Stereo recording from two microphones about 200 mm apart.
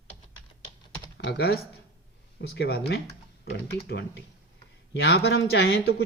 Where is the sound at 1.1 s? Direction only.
60° left (ahead or behind).